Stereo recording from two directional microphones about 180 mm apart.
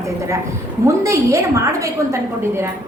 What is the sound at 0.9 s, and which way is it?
A woman's voice, 15° right (ahead or behind).